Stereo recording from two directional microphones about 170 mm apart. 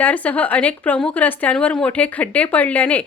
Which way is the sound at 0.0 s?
10° left (ahead or behind).